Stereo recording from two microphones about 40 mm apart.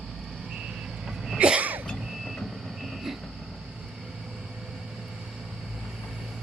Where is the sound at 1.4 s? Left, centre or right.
Right.